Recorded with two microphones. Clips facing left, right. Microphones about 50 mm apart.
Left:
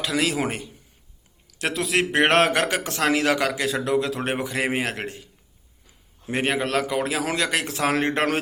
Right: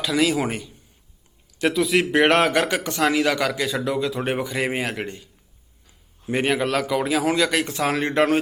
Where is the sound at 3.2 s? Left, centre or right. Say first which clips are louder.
Right 1 dB; centre.